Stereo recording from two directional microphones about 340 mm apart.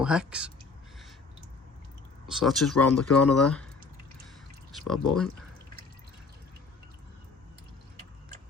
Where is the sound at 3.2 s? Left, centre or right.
Left.